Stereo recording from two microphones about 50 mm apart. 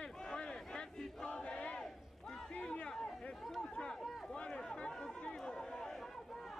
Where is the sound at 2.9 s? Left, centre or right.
Centre.